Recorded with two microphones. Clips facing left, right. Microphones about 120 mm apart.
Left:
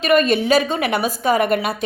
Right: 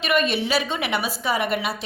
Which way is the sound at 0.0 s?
40° left (ahead or behind).